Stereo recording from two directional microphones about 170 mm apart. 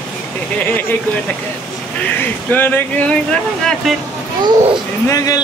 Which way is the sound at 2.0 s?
10° left (ahead or behind).